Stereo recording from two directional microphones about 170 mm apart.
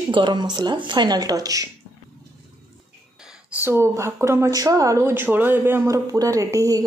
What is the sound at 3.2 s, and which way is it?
A woman's voice, 10° right (ahead or behind).